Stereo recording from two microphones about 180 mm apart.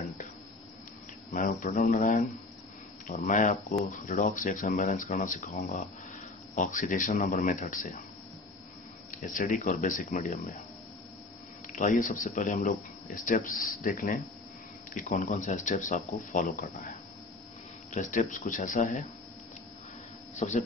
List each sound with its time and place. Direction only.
1.3 s speech: 50° left (ahead or behind)
9.1 s speech: 50° left (ahead or behind)
11.6 s speech: 45° left (ahead or behind)
17.9 s speech: 45° left (ahead or behind)
20.3 s speech: 40° left (ahead or behind)